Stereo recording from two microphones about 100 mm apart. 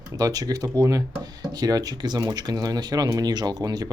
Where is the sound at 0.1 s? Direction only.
35° right (ahead or behind).